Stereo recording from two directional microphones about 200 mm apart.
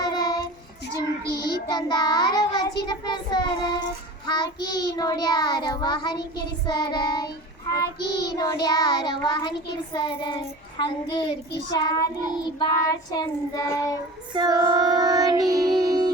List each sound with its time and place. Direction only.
0.0 s child singing: 20° left (ahead or behind)
1.7 s child singing: 20° left (ahead or behind)
14.3 s child singing: 20° right (ahead or behind)